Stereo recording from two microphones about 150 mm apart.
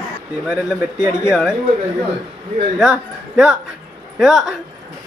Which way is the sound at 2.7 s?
5° right (ahead or behind).